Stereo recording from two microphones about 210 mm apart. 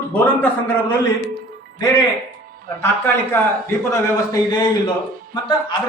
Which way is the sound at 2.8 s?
10° left (ahead or behind).